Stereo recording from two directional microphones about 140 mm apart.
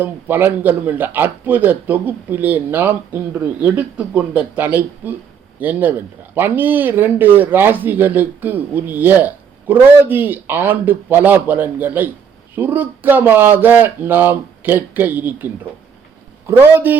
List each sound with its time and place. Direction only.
0.0 s speech: 15° right (ahead or behind)
16.5 s speech: 15° right (ahead or behind)